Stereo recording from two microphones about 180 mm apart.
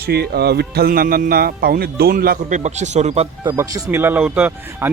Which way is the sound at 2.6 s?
40° right (ahead or behind).